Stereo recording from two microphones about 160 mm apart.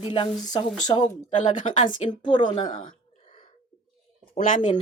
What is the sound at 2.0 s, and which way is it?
Speech, 30° left (ahead or behind).